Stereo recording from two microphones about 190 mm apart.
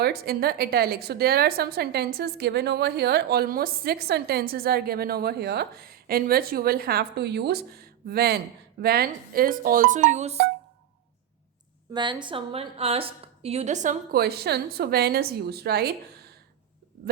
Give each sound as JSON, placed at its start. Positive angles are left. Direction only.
{"t": 0.0, "sound": "a woman's voice", "side_deg": -55}
{"t": 11.9, "sound": "a woman's voice", "side_deg": -25}